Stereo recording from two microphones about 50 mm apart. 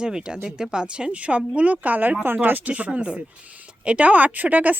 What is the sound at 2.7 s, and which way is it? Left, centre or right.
Speech, right.